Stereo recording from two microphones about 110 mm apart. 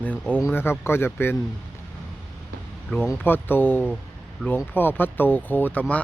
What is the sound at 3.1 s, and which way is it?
Speech, 20° left (ahead or behind).